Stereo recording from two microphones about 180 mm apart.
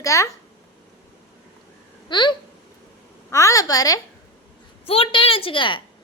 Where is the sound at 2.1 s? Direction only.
25° left (ahead or behind).